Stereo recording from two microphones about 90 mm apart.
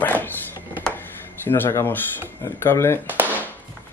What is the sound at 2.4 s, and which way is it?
Speech, 30° left (ahead or behind).